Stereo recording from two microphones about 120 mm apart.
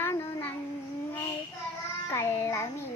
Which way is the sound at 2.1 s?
20° left (ahead or behind).